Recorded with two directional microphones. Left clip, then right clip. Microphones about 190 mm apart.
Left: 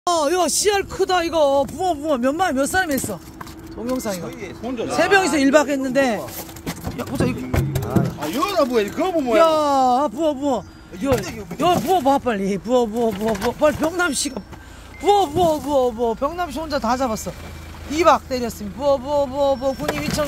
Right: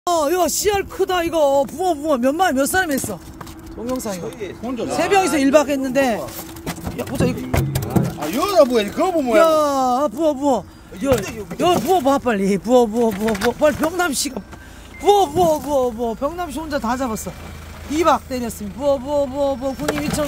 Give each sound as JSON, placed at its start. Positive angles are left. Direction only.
{"t": 0.0, "sound": "speech", "side_deg": -5}
{"t": 3.8, "sound": "speech", "side_deg": 0}
{"t": 8.4, "sound": "speech", "side_deg": -50}
{"t": 9.4, "sound": "speech", "side_deg": -10}